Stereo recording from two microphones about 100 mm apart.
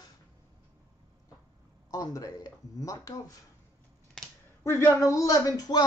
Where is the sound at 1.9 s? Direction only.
35° left (ahead or behind).